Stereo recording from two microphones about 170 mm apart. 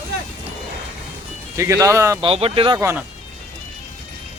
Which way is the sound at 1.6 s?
20° right (ahead or behind).